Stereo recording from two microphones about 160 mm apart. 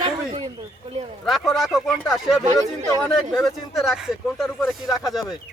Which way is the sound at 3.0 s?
Centre (ahead or behind).